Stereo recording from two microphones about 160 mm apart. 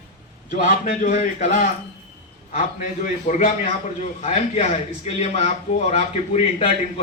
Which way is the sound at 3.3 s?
50° left (ahead or behind).